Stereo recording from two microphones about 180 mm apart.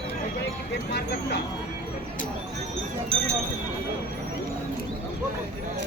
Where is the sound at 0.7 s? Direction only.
65° left (ahead or behind).